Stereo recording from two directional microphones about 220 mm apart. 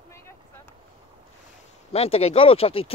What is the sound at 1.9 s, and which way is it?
Speech, 25° left (ahead or behind).